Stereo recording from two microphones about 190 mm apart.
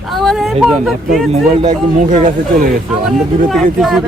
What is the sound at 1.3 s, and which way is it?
Speech, 35° right (ahead or behind).